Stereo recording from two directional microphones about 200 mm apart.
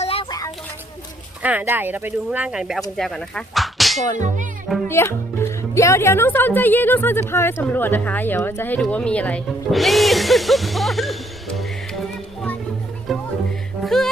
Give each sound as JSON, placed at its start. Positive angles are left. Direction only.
{"t": 0.0, "sound": "a sound", "side_deg": 30}
{"t": 1.4, "sound": "speech", "side_deg": -10}
{"t": 3.0, "sound": "whip", "side_deg": 5}
{"t": 4.9, "sound": "speech", "side_deg": 10}
{"t": 13.1, "sound": "music", "side_deg": 0}